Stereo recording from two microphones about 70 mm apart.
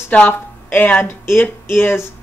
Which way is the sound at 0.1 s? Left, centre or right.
Left.